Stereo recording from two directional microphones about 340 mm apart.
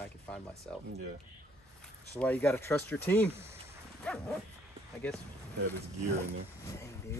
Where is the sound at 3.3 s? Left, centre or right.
Centre.